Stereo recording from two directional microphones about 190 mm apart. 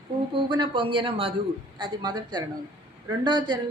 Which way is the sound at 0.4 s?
25° right (ahead or behind).